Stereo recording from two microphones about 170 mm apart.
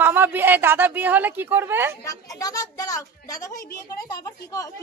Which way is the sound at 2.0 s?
20° left (ahead or behind).